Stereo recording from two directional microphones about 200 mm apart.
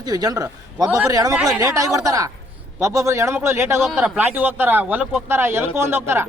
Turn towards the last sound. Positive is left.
turn(degrees=-10)  # may be behind; listen again after turning